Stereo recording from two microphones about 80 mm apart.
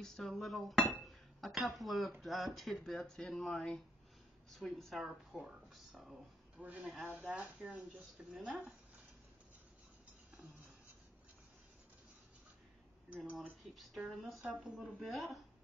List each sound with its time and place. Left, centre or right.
0.0 s speech: centre
6.6 s a woman's voice: centre
13.4 s speech: centre
14.5 s a woman's voice: centre
15.0 s speech: centre